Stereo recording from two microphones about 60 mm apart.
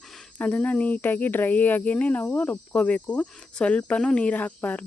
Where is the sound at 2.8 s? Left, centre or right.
Left.